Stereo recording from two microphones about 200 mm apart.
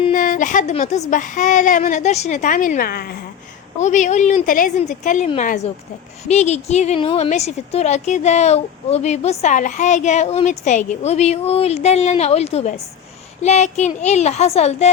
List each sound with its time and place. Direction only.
0.1 s a woman's voice: 40° left (ahead or behind)
3.8 s a woman's voice: 35° left (ahead or behind)